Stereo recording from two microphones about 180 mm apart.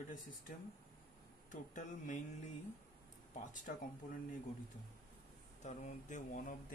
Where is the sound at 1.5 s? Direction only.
45° left (ahead or behind).